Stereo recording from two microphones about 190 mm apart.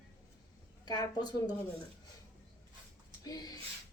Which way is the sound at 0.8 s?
20° left (ahead or behind).